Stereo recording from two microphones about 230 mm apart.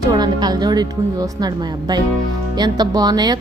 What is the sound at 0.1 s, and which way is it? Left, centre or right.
A woman's voice, centre.